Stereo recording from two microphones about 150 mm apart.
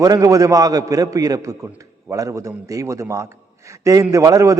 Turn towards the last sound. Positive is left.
turn(degrees=-20)  # may be behind; listen again after turning